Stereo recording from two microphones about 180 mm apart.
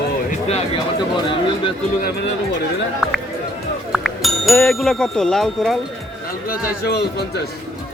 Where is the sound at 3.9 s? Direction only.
Centre (ahead or behind).